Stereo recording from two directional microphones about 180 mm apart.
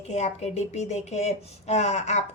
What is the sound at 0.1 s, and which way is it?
Speech, 40° left (ahead or behind).